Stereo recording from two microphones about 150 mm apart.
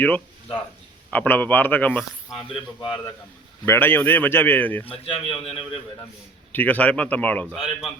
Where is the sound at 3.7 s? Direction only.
15° left (ahead or behind).